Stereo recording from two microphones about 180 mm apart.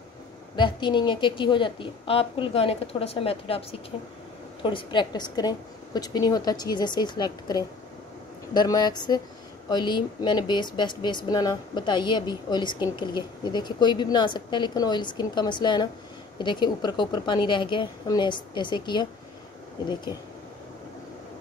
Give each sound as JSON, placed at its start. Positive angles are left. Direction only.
{"t": 0.6, "sound": "speech", "side_deg": 25}